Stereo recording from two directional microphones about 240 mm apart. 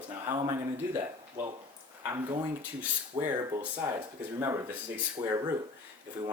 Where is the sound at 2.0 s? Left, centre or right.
Centre.